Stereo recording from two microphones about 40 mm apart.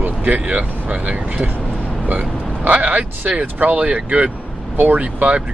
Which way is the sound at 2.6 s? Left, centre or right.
Right.